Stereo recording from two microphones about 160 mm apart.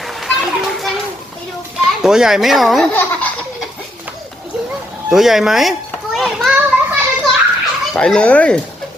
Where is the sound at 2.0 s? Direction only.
5° right (ahead or behind).